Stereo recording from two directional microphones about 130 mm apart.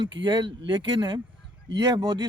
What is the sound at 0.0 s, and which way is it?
Speech, 35° right (ahead or behind).